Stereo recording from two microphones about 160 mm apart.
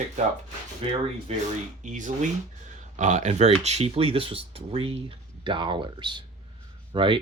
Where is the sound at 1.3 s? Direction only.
40° right (ahead or behind).